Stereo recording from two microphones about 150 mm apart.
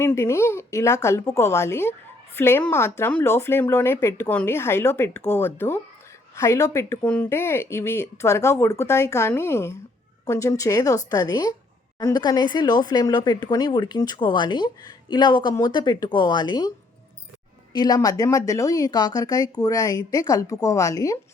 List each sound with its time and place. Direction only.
0.0 s speech: 20° left (ahead or behind)
17.7 s speech: 25° left (ahead or behind)